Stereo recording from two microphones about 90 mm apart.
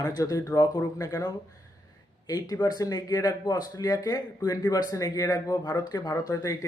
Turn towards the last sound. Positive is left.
turn(degrees=40)  # may be behind; listen again after turning